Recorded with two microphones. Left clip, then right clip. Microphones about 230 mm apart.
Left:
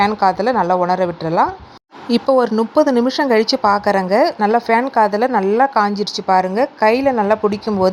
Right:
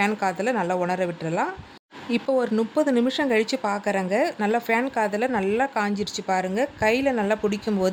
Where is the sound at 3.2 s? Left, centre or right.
Centre.